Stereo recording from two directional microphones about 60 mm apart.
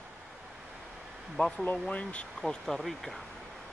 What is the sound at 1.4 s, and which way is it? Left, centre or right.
Speech, left.